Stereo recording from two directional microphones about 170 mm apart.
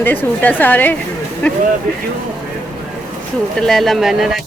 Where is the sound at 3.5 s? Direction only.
Centre (ahead or behind).